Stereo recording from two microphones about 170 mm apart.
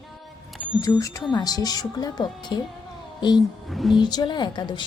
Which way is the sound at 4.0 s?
25° left (ahead or behind).